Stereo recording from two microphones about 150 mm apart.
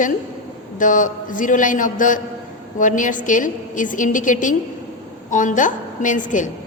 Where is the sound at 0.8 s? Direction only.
60° left (ahead or behind).